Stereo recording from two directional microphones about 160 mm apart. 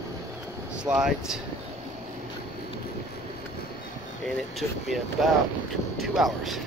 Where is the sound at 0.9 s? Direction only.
5° right (ahead or behind).